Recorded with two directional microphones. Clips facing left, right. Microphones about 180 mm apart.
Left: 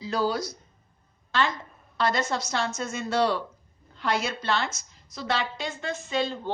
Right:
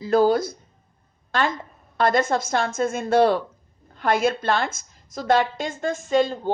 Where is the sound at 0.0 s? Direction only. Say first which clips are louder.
Right 9 dB; 50° right (ahead or behind).